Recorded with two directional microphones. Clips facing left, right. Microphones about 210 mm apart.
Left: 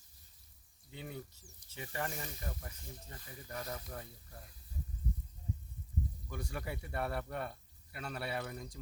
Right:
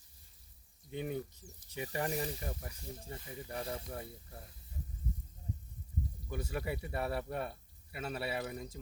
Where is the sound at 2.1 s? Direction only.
35° right (ahead or behind).